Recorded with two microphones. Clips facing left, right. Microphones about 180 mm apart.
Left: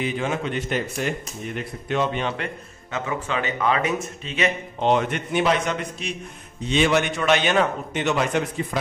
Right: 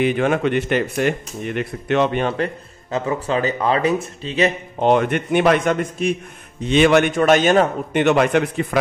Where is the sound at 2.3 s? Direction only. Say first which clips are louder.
Right 8 dB; 35° right (ahead or behind).